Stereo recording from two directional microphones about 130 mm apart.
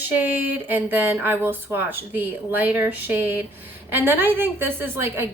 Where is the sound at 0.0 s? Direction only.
15° right (ahead or behind).